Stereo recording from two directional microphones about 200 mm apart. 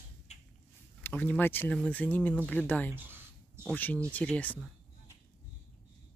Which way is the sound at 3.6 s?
10° left (ahead or behind).